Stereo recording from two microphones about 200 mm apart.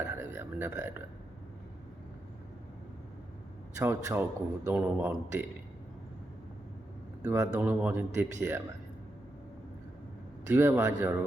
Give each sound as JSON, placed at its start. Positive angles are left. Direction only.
{"t": 0.0, "sound": "speech", "side_deg": -10}
{"t": 3.8, "sound": "speech", "side_deg": -15}
{"t": 7.2, "sound": "speech", "side_deg": -15}
{"t": 10.4, "sound": "speech", "side_deg": -10}